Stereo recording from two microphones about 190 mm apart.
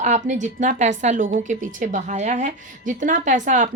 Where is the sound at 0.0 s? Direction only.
40° right (ahead or behind).